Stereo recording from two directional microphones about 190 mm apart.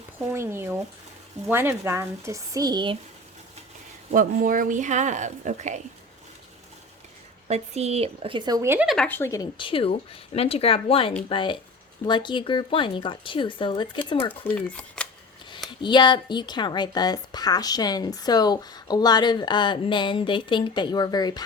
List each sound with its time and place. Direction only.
0.3 s speech: 15° right (ahead or behind)
4.1 s speech: 45° right (ahead or behind)
7.4 s a woman's voice: 35° right (ahead or behind); by 8.9 s 15° right (ahead or behind)
8.9 s a woman's voice: 5° left (ahead or behind); by 14.0 s 25° left (ahead or behind)
14.4 s speech: 5° left (ahead or behind)
15.8 s a woman's voice: 25° left (ahead or behind)